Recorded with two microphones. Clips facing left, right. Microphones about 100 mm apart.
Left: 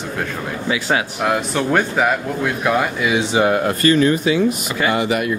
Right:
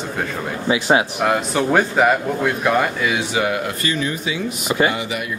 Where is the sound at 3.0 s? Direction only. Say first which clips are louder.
Left 4 dB; 30° left (ahead or behind).